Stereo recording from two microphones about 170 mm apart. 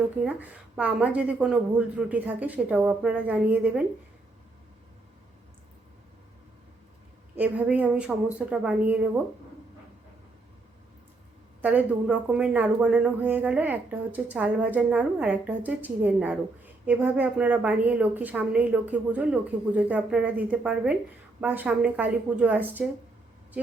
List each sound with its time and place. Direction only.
0.3 s speech: 10° right (ahead or behind)
7.3 s speech: 10° right (ahead or behind)
11.6 s speech: 10° right (ahead or behind)